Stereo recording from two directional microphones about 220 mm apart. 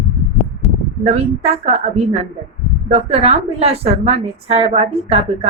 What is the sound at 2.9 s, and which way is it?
A woman's voice, 30° right (ahead or behind).